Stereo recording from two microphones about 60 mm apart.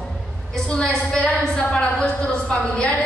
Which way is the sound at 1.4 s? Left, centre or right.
Centre.